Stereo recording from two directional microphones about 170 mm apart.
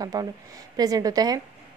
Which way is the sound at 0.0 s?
20° right (ahead or behind).